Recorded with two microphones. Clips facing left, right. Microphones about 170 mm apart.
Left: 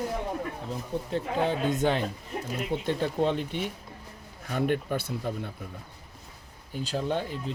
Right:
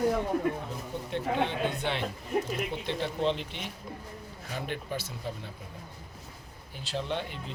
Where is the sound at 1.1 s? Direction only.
40° left (ahead or behind); by 5.5 s 55° left (ahead or behind).